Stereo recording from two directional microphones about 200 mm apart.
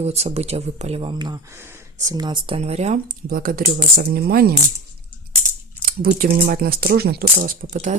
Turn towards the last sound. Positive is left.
turn(degrees=-40)  # may be behind; listen again after turning